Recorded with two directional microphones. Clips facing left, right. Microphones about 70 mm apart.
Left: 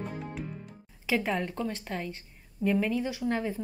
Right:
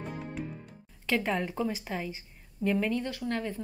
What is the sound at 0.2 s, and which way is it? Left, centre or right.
A woman's voice, centre.